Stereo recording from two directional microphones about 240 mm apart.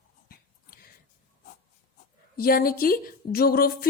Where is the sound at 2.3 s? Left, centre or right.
Left.